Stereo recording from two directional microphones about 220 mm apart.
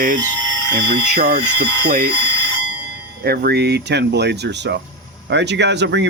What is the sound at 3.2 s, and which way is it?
Speech, 45° right (ahead or behind).